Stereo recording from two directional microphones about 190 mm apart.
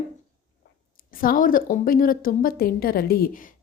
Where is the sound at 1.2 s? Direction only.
45° left (ahead or behind).